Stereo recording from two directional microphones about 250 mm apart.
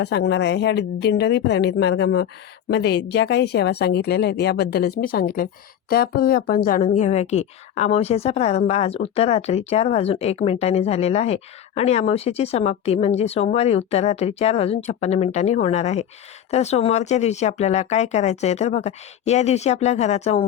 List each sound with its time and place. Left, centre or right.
0.0 s a woman's voice: left